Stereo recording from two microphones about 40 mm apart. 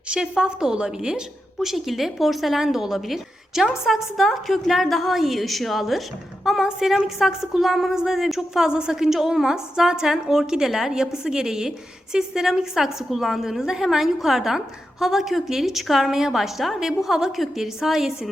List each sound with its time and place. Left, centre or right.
0.1 s a woman's voice: right
1.5 s a woman's voice: centre
8.6 s a woman's voice: centre